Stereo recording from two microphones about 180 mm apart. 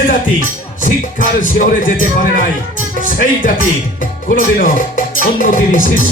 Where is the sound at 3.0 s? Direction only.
45° left (ahead or behind).